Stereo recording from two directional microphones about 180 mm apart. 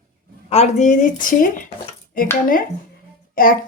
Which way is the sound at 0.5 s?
40° left (ahead or behind).